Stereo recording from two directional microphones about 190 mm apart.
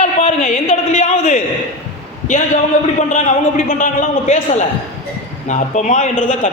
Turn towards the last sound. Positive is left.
turn(degrees=45)  # may be behind; listen again after turning